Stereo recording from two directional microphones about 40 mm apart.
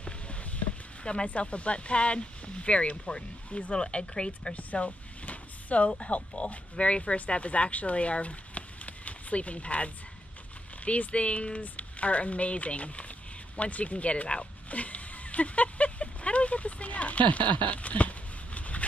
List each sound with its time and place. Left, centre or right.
0.0 s a sound: left
3.4 s speech: left
3.7 s speech: left
4.6 s vehicle: left
5.9 s speech: left
10.9 s speech: left
13.6 s dog: left